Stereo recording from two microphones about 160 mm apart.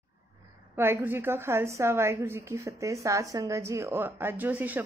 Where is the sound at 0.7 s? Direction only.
15° right (ahead or behind).